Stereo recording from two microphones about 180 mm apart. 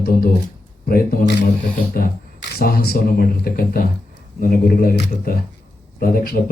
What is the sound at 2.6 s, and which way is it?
Speech, 55° left (ahead or behind).